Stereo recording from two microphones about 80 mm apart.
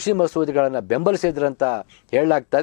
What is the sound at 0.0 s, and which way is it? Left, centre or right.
Speech, centre.